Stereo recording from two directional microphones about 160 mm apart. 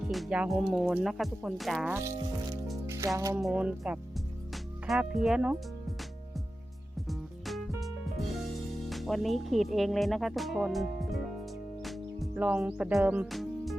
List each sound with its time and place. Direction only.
0.1 s speech: 5° right (ahead or behind)
1.9 s speech: 20° right (ahead or behind)
2.8 s music: 15° right (ahead or behind)
3.2 s speech: 20° right (ahead or behind)
3.4 s speech: 5° right (ahead or behind)
7.1 s music: centre (ahead or behind)
8.9 s speech: centre (ahead or behind)
11.8 s music: centre (ahead or behind)
12.3 s speech: 10° right (ahead or behind)